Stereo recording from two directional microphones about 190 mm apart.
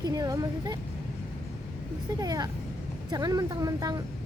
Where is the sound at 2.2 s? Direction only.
20° right (ahead or behind).